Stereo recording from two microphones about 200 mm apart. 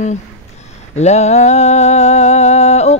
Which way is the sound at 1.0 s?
35° left (ahead or behind).